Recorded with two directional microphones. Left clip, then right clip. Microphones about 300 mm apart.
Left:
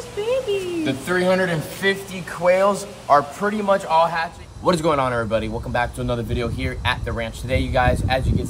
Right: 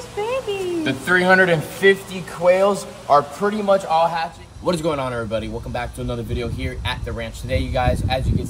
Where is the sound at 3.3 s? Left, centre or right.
Right.